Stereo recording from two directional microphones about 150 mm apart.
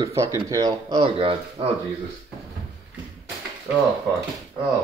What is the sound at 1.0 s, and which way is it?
Speech, 40° right (ahead or behind).